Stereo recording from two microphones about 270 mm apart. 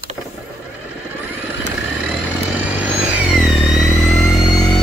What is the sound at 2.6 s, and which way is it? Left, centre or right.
Vehicle, centre.